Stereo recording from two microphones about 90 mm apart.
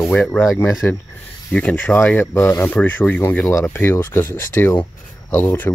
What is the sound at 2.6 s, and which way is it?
Speech, 15° left (ahead or behind).